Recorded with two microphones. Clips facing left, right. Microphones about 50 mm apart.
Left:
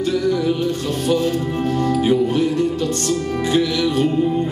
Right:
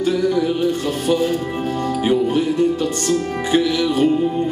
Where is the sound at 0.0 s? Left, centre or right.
Centre.